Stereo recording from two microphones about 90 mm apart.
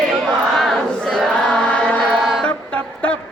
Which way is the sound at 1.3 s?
10° left (ahead or behind).